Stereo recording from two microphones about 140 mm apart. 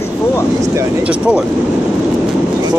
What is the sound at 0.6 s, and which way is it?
Speech, 20° right (ahead or behind).